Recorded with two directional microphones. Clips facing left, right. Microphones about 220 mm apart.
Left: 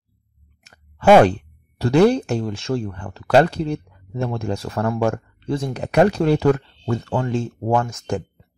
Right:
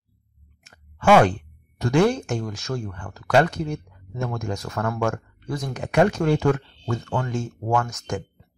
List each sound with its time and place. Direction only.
1.2 s speech: 35° left (ahead or behind)